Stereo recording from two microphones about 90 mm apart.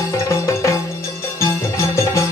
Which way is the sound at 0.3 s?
30° left (ahead or behind).